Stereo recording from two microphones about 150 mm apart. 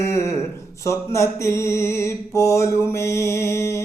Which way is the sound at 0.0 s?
20° left (ahead or behind).